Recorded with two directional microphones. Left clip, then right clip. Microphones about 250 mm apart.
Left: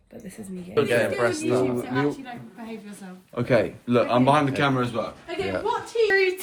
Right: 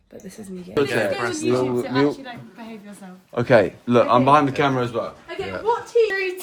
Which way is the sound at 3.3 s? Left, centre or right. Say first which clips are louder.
Right 6 dB; right.